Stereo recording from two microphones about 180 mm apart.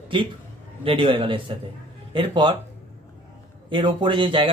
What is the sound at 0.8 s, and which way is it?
Speech, 30° right (ahead or behind).